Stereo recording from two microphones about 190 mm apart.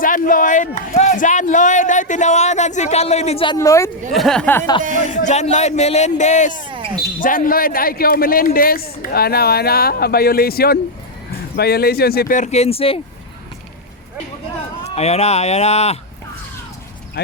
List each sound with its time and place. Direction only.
0.0 s speech: 45° left (ahead or behind); by 3.9 s 15° left (ahead or behind)
4.1 s speech: centre (ahead or behind)
4.9 s speech: 40° left (ahead or behind)
6.6 s basketball bounce: 25° right (ahead or behind)
7.2 s a man's voice: 45° left (ahead or behind); by 13.0 s 30° left (ahead or behind)
14.8 s speech: 35° left (ahead or behind)
17.2 s speech: 55° left (ahead or behind)